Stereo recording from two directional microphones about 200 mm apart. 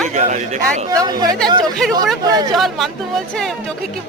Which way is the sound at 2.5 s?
Centre (ahead or behind).